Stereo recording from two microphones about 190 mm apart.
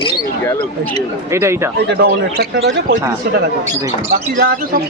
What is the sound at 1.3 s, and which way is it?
Speech, 15° right (ahead or behind).